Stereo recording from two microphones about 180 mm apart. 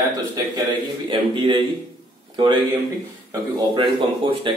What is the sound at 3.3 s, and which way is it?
Speech, 25° right (ahead or behind).